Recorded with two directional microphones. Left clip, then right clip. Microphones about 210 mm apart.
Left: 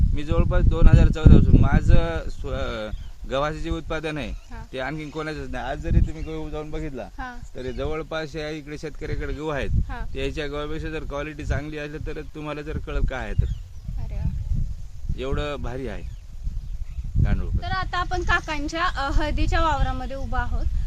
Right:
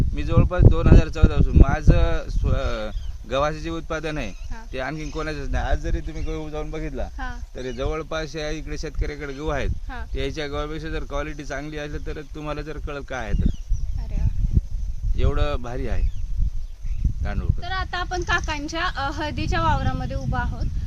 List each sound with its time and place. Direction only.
0.1 s speech: 10° right (ahead or behind)
15.1 s speech: 10° right (ahead or behind)
17.2 s speech: 15° right (ahead or behind)
17.6 s speech: 5° left (ahead or behind)